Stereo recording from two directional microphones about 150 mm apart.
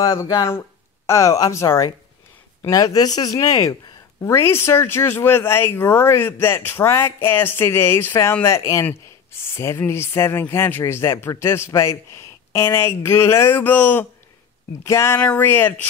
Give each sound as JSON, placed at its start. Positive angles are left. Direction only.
{"t": 0.0, "sound": "speech", "side_deg": 20}